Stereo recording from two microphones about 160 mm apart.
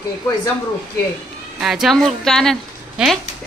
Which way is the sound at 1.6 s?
5° right (ahead or behind).